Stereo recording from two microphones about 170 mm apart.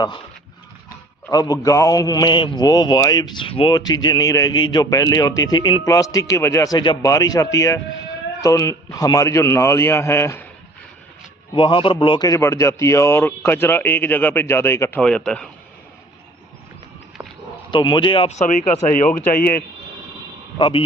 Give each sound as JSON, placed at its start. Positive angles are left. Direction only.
{"t": 1.3, "sound": "a man's voice", "side_deg": 20}
{"t": 11.5, "sound": "a man's voice", "side_deg": 30}
{"t": 17.7, "sound": "speech", "side_deg": 25}
{"t": 20.6, "sound": "a man's voice", "side_deg": 30}